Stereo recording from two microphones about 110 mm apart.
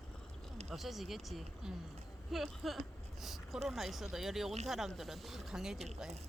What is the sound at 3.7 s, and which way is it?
Speech, centre (ahead or behind).